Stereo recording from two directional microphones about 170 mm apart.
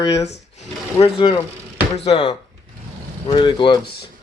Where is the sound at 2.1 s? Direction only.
30° left (ahead or behind).